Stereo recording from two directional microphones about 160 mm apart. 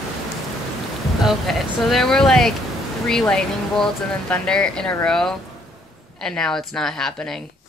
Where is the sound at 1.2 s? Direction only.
Centre (ahead or behind).